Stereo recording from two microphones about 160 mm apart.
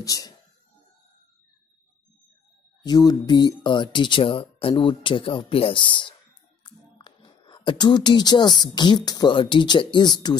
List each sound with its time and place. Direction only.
0.0 s speech: 20° left (ahead or behind)
2.8 s speech: 25° left (ahead or behind)